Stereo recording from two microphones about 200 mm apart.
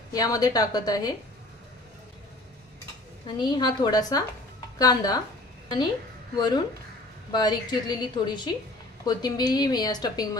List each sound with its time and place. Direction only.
0.1 s a woman's voice: 20° left (ahead or behind)
3.3 s a woman's voice: 20° left (ahead or behind)
6.3 s a woman's voice: 20° left (ahead or behind)